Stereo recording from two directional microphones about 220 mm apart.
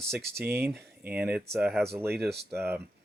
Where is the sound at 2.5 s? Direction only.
10° right (ahead or behind).